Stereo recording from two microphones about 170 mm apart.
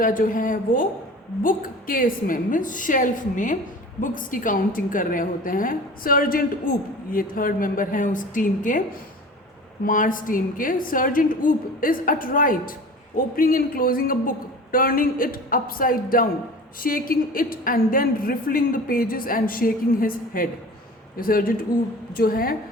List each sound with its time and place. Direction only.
0.0 s a woman's voice: 55° left (ahead or behind)